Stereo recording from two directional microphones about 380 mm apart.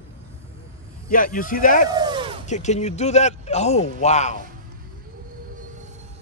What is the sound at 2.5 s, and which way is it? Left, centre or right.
A man's voice, centre.